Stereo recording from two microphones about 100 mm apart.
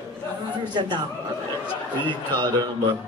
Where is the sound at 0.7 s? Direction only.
50° right (ahead or behind).